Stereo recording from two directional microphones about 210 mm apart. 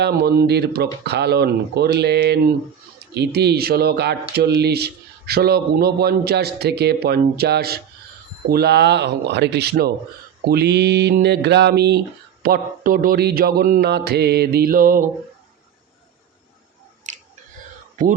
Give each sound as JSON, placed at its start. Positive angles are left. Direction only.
{"t": 0.0, "sound": "speech", "side_deg": -50}
{"t": 17.1, "sound": "chewing", "side_deg": -35}